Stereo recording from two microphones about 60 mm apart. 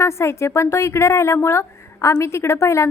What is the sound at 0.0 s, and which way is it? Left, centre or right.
A woman's voice, left.